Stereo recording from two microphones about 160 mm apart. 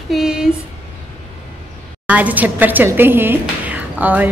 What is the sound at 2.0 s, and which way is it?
A woman's voice, 10° right (ahead or behind).